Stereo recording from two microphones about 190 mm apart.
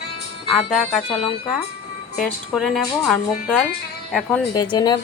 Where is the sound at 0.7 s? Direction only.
Centre (ahead or behind).